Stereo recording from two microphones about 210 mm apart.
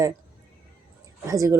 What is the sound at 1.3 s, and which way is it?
Speech, 15° right (ahead or behind).